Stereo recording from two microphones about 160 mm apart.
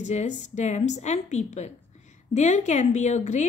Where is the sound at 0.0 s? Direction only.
45° left (ahead or behind).